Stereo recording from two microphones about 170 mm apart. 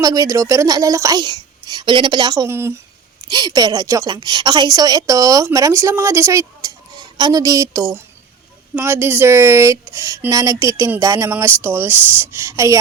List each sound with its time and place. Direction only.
0.0 s a woman's voice: 20° right (ahead or behind)
3.2 s a woman's voice: 25° right (ahead or behind)